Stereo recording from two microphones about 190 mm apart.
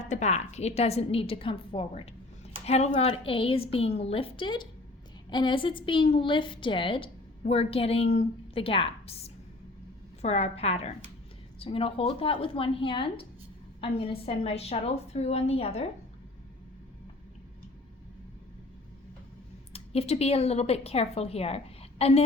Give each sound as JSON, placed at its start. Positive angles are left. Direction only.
{"t": 0.0, "sound": "a woman's voice", "side_deg": 40}
{"t": 19.7, "sound": "a woman's voice", "side_deg": 30}